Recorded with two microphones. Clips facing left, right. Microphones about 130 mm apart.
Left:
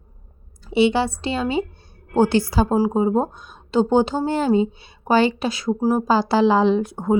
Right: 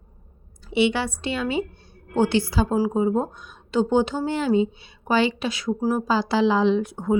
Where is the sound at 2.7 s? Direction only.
30° left (ahead or behind).